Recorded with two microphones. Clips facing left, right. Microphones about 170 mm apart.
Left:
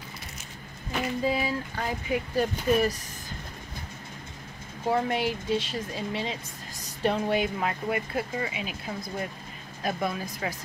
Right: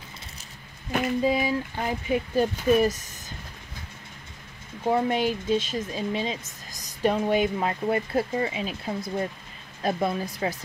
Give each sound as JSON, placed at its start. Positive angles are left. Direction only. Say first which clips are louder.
{"t": 1.2, "sound": "speech", "louder": "right 3 dB", "side_deg": -20}
{"t": 4.8, "sound": "a woman's voice", "louder": "right 3 dB", "side_deg": -20}
{"t": 7.6, "sound": "speech", "louder": "right 3 dB", "side_deg": -30}